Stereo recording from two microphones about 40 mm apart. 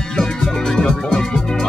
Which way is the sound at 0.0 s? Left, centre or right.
Centre.